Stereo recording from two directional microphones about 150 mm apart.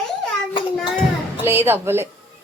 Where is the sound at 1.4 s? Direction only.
15° right (ahead or behind).